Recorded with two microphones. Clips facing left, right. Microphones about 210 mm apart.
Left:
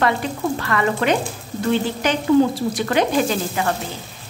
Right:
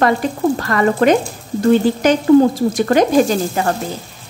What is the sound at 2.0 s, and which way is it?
Stir, 45° right (ahead or behind).